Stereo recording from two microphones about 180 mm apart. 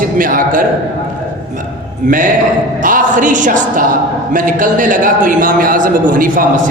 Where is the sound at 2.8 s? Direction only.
50° right (ahead or behind).